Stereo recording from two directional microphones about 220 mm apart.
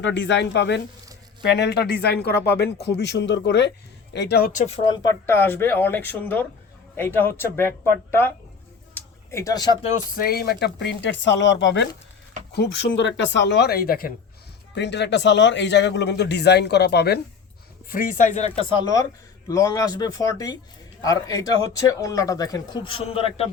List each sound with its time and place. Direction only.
0.0 s a man's voice: 55° left (ahead or behind); by 7.7 s 10° left (ahead or behind)
9.0 s a sound: 15° left (ahead or behind)
10.2 s a man's voice: 45° left (ahead or behind)
19.5 s speech: 15° left (ahead or behind)